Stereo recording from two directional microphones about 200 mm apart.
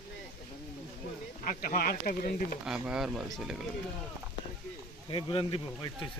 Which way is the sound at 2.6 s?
5° right (ahead or behind).